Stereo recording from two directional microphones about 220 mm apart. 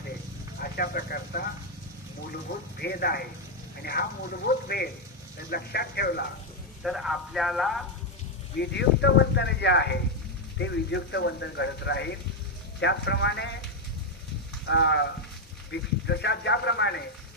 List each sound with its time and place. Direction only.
0.6 s speech: 45° left (ahead or behind)
6.8 s speech: centre (ahead or behind)
8.5 s speech: 50° left (ahead or behind)
14.6 s speech: 55° left (ahead or behind)